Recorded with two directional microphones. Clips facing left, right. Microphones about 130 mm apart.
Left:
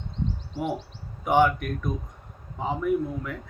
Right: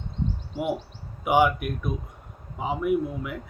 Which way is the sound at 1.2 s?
10° right (ahead or behind).